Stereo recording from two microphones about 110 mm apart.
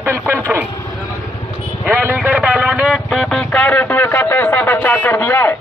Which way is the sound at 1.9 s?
20° right (ahead or behind).